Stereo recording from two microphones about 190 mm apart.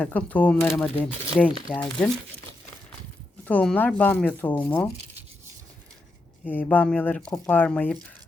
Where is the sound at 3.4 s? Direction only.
5° left (ahead or behind).